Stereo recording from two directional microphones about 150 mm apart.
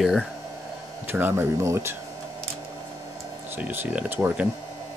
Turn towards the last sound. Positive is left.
turn(degrees=-10)  # may be behind; listen again after turning